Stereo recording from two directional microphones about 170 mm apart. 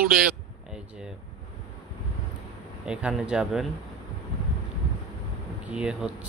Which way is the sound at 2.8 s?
5° right (ahead or behind).